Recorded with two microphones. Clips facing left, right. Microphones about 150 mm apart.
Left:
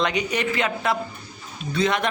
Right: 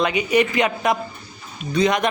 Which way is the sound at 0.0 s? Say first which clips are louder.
Right 5 dB; 10° right (ahead or behind).